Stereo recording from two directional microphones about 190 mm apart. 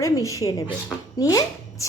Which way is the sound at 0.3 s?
15° left (ahead or behind).